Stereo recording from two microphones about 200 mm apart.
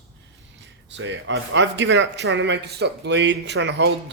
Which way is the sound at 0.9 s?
65° right (ahead or behind).